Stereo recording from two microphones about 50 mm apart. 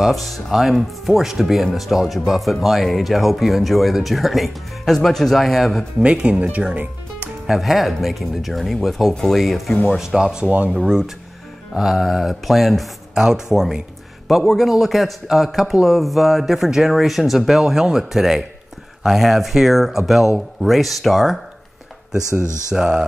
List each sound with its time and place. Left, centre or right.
0.0 s speech: centre
6.0 s speech: centre
7.4 s speech: centre
9.8 s speech: centre
10.5 s speech: right
10.8 s speech: centre
13.1 s speech: centre
14.2 s speech: centre
22.7 s speech: centre